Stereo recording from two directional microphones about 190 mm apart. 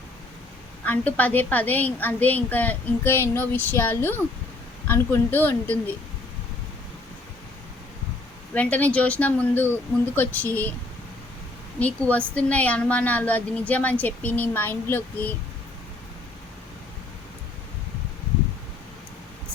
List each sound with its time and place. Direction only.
0.9 s a woman's voice: 10° left (ahead or behind)
8.5 s a woman's voice: 5° left (ahead or behind)
11.8 s a woman's voice: 5° left (ahead or behind)